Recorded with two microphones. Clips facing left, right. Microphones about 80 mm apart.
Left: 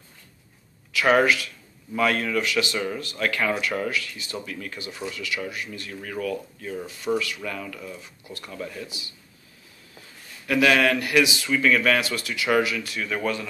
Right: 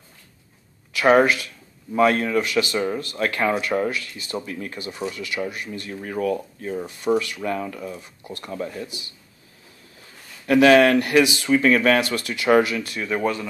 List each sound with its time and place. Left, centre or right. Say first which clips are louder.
0.9 s speech: right 3 dB; right
10.4 s speech: right 6 dB; right